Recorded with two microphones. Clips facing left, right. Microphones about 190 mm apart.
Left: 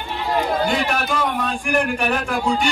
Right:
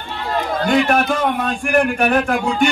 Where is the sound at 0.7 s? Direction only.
55° right (ahead or behind).